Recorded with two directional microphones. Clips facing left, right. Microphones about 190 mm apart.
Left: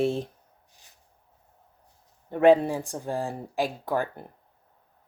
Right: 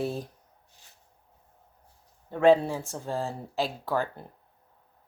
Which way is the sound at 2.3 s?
15° left (ahead or behind).